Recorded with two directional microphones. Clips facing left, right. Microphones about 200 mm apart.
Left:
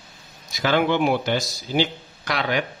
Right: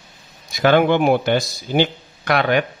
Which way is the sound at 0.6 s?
55° right (ahead or behind).